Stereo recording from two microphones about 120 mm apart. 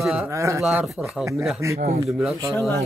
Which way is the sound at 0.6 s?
10° right (ahead or behind).